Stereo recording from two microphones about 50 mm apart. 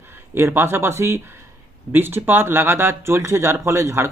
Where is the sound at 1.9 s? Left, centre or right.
Right.